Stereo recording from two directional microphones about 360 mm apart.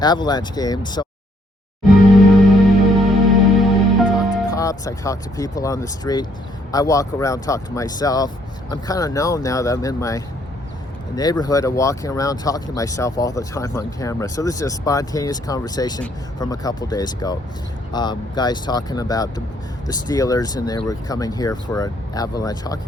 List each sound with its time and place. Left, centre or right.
0.0 s speech: centre
1.9 s music: centre
4.5 s speech: centre